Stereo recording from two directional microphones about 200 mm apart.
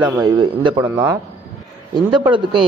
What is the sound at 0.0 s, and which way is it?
A man's voice, 20° right (ahead or behind).